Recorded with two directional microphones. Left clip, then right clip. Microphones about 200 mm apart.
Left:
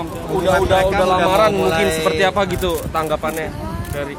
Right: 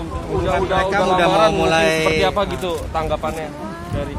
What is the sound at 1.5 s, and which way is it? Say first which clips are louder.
Speech: right 1 dB; 40° right (ahead or behind).